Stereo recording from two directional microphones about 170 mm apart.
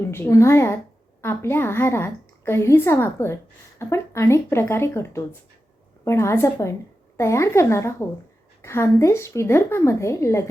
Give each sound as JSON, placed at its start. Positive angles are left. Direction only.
{"t": 0.0, "sound": "a woman's voice", "side_deg": 15}